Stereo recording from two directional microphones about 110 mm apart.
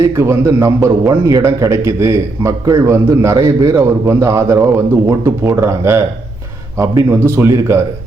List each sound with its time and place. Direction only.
0.0 s a man's voice: 25° right (ahead or behind)